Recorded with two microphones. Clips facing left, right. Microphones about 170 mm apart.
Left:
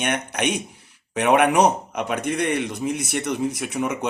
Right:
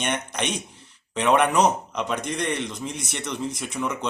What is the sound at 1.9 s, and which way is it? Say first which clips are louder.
Speech: left 3 dB; 55° left (ahead or behind).